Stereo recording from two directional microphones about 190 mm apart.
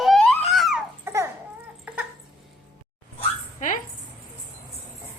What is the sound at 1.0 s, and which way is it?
Babbling, 15° right (ahead or behind).